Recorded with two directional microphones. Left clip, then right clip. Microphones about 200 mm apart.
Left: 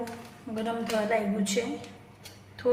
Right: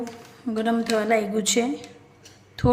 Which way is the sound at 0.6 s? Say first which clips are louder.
Right 6 dB; 50° right (ahead or behind).